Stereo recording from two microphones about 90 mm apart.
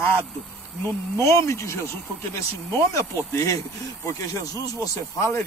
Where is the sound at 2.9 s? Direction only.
35° left (ahead or behind).